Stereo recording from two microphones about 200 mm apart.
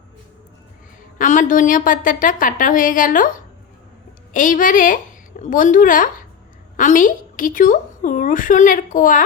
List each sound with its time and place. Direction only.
1.2 s a woman's voice: 40° left (ahead or behind)